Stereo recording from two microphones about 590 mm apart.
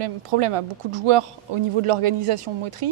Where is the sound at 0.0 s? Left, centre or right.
Right.